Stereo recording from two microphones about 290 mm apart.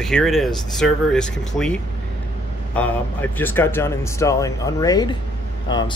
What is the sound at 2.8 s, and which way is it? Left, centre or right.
Speech, centre.